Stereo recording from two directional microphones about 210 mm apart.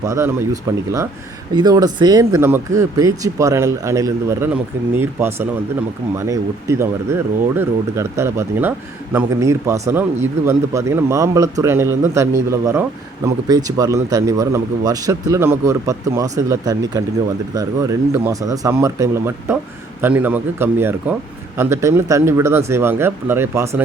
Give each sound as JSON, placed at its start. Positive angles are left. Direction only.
{"t": 0.0, "sound": "speech", "side_deg": -15}